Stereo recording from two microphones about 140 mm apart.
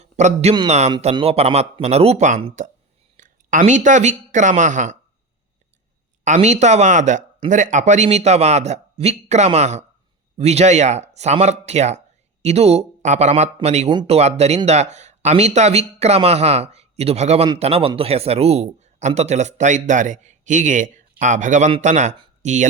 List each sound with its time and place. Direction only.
0.0 s a man's voice: 55° right (ahead or behind)
3.2 s a sound: 70° right (ahead or behind)
3.7 s a man's voice: 60° right (ahead or behind)
6.2 s a man's voice: 55° right (ahead or behind)